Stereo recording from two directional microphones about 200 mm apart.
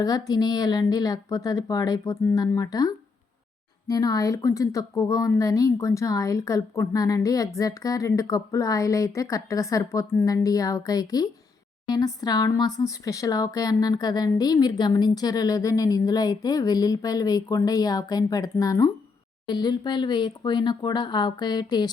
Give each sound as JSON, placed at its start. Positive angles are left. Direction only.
{"t": 0.0, "sound": "a woman's voice", "side_deg": 20}